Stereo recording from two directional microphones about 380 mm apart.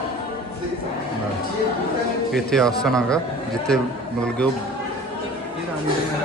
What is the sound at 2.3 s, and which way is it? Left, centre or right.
Speech, centre.